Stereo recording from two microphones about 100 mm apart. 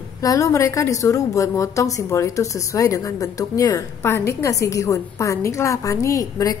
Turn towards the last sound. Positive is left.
turn(degrees=35)  # may be behind; listen again after turning